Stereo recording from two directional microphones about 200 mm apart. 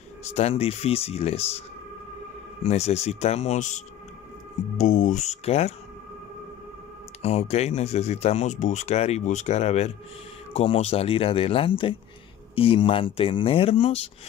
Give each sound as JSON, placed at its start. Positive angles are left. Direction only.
{"t": 0.2, "sound": "speech", "side_deg": 30}
{"t": 2.6, "sound": "speech", "side_deg": 35}
{"t": 7.2, "sound": "speech", "side_deg": 30}